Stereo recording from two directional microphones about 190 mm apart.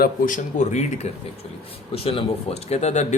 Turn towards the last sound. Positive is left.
turn(degrees=35)  # may be behind; listen again after turning